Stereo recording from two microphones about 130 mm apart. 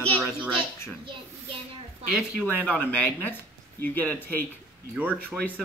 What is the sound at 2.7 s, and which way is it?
Speech, 10° left (ahead or behind).